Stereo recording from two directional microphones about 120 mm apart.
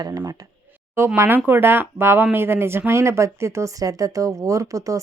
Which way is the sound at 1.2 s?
15° right (ahead or behind).